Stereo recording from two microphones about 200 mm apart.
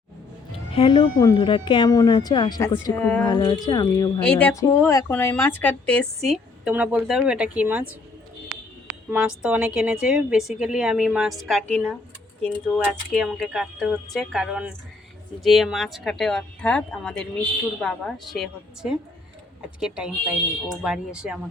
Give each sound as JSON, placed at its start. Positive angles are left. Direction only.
{"t": 0.7, "sound": "speech", "side_deg": 25}
{"t": 3.2, "sound": "speech", "side_deg": 20}
{"t": 4.2, "sound": "speech", "side_deg": 5}
{"t": 9.0, "sound": "speech", "side_deg": -5}
{"t": 13.1, "sound": "speech", "side_deg": 0}